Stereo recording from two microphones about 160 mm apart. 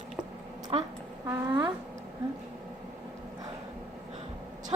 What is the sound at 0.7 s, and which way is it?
Speech, 35° right (ahead or behind).